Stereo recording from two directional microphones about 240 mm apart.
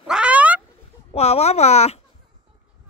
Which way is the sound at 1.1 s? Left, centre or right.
Left.